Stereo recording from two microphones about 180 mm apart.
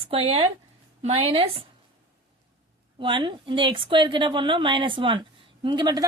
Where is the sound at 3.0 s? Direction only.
25° right (ahead or behind).